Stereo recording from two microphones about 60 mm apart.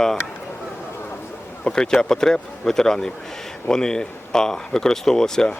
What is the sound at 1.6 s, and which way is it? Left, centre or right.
Speech, centre.